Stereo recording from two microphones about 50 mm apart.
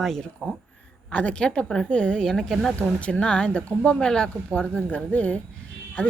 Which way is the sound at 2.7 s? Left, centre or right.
Left.